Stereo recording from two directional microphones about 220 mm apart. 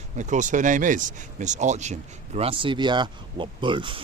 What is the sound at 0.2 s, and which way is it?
Speech, 35° right (ahead or behind).